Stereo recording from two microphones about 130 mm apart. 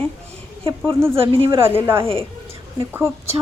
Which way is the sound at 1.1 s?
45° right (ahead or behind).